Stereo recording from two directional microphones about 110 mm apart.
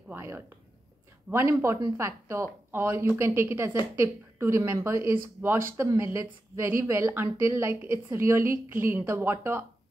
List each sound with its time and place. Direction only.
0.1 s a woman's voice: 25° right (ahead or behind)